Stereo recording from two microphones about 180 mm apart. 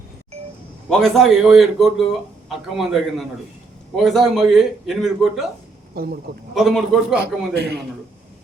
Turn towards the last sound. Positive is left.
turn(degrees=-65)  # may be behind; listen again after turning